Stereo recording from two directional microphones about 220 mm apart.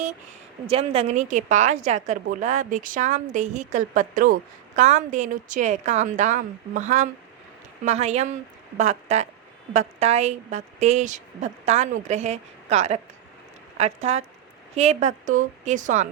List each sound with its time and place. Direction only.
0.7 s a woman's voice: 25° right (ahead or behind)